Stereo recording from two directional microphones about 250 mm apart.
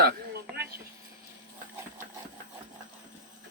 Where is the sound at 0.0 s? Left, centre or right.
Right.